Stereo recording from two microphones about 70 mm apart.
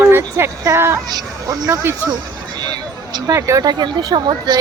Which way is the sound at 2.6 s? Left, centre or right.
Right.